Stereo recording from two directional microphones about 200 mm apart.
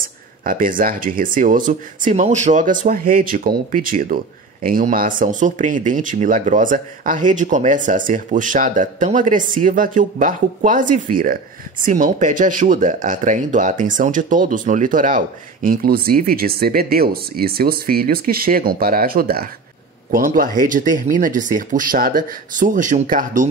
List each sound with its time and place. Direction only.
0.0 s speech: 45° right (ahead or behind)